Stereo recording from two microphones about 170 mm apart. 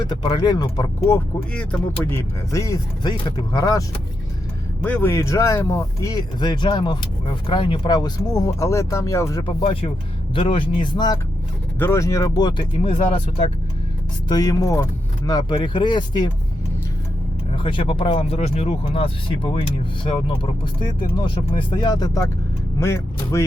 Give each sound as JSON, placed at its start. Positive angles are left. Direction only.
{"t": 0.1, "sound": "speech", "side_deg": 25}
{"t": 4.8, "sound": "speech", "side_deg": 10}
{"t": 9.4, "sound": "speech", "side_deg": 35}
{"t": 14.3, "sound": "speech", "side_deg": 20}
{"t": 17.6, "sound": "speech", "side_deg": 30}
{"t": 21.2, "sound": "speech", "side_deg": 30}